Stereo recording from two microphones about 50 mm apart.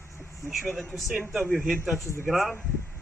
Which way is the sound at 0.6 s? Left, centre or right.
Centre.